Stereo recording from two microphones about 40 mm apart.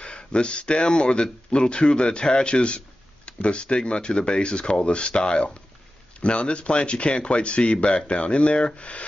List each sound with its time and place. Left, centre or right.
0.0 s speech: left